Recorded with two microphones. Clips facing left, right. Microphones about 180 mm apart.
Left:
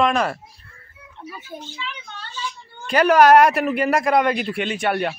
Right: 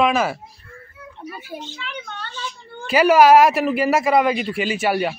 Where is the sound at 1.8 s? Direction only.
60° right (ahead or behind).